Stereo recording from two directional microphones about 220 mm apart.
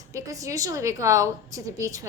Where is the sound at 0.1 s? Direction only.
15° right (ahead or behind).